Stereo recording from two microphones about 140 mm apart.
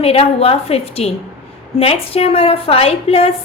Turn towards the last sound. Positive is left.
turn(degrees=45)  # may be behind; listen again after turning